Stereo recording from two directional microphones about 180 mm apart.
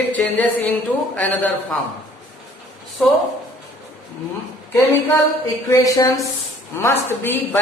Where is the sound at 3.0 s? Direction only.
Centre (ahead or behind).